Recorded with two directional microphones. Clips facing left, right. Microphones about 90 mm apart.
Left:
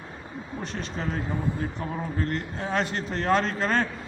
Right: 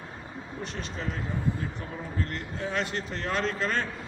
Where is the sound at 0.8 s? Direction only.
40° left (ahead or behind).